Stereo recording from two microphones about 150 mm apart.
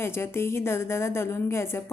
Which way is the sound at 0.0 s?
15° left (ahead or behind).